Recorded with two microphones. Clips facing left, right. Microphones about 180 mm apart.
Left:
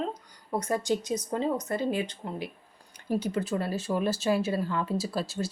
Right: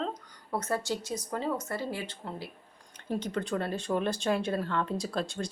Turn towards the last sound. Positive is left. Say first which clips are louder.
# left 2 dB
turn(degrees=5)  # may be behind; listen again after turning